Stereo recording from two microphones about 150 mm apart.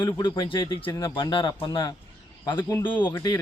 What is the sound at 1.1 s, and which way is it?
Speech, 30° left (ahead or behind).